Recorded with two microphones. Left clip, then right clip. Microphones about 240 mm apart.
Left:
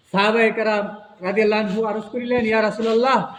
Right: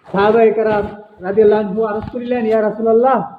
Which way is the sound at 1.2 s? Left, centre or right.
Left.